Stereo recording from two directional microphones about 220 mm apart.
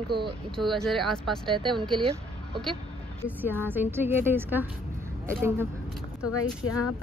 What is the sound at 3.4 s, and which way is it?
A woman's voice, 10° right (ahead or behind).